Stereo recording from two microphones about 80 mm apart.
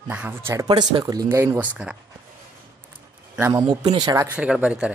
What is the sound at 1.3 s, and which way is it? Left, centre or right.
Speech, right.